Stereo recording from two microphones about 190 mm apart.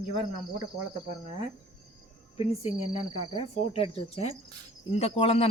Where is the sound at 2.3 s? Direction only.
30° left (ahead or behind).